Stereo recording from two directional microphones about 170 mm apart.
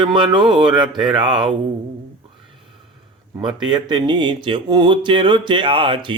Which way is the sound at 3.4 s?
25° right (ahead or behind).